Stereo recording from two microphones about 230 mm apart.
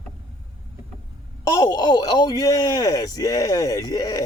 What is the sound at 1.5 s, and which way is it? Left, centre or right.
Speech, centre.